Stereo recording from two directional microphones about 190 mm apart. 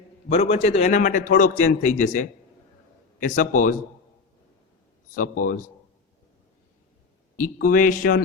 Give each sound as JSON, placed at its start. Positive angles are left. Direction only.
{"t": 0.3, "sound": "a man's voice", "side_deg": 30}
{"t": 5.1, "sound": "speech", "side_deg": 45}
{"t": 7.3, "sound": "speech", "side_deg": 45}